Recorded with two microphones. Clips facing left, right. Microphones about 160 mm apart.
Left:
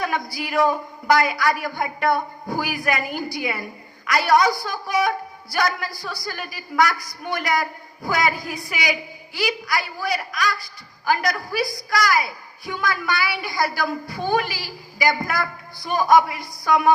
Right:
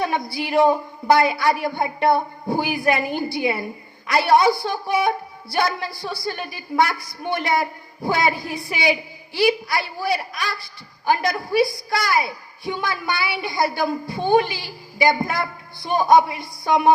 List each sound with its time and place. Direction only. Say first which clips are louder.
0.0 s a woman's voice: right 2 dB; 25° right (ahead or behind)